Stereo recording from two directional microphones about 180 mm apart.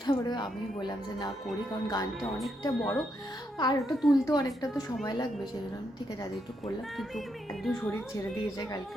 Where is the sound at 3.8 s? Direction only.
Centre (ahead or behind).